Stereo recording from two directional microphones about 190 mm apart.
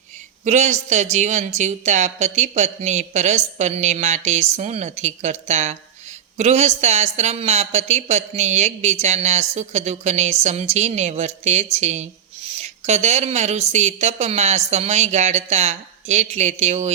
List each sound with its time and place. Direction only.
0.4 s speech: 35° right (ahead or behind)